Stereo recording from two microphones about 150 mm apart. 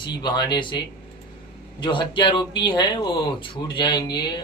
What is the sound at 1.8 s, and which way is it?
Speech, 35° left (ahead or behind).